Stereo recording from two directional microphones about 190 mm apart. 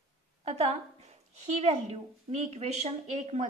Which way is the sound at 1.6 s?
35° right (ahead or behind).